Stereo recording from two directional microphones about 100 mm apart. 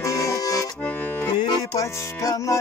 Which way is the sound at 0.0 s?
30° left (ahead or behind).